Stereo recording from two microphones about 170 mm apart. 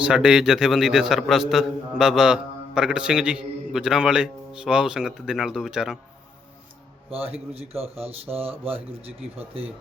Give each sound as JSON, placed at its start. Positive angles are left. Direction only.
{"t": 0.0, "sound": "a man's voice", "side_deg": -5}
{"t": 7.1, "sound": "speech", "side_deg": -35}